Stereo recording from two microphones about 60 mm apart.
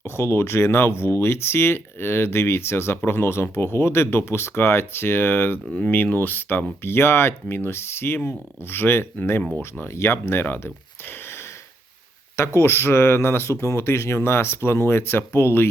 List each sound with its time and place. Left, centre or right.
0.0 s speech: left
12.5 s speech: left